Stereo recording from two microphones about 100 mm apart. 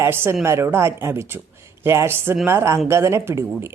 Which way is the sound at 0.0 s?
25° right (ahead or behind).